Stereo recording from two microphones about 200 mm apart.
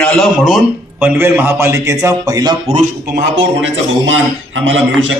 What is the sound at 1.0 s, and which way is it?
A man's voice, 10° right (ahead or behind).